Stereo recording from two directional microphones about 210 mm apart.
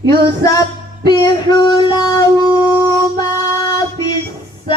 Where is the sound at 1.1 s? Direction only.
20° left (ahead or behind).